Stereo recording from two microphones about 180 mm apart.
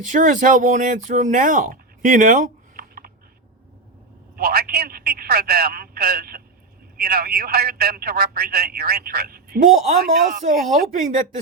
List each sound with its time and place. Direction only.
0.1 s speech: 45° right (ahead or behind)
4.4 s a sound: 60° right (ahead or behind)
6.9 s speech: 60° right (ahead or behind)